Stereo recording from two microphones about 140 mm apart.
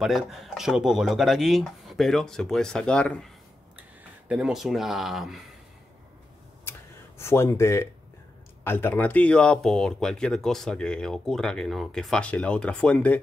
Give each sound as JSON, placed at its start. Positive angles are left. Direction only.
{"t": 0.0, "sound": "speech", "side_deg": 0}
{"t": 4.3, "sound": "speech", "side_deg": -5}
{"t": 7.2, "sound": "speech", "side_deg": 20}